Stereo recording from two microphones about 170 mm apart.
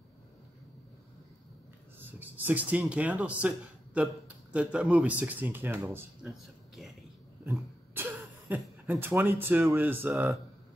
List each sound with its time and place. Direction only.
2.0 s speech: 10° right (ahead or behind)
7.4 s a sound: 10° right (ahead or behind)
9.0 s speech: 10° right (ahead or behind)